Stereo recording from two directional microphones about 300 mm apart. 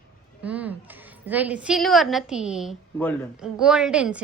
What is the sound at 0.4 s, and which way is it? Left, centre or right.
A woman's voice, centre.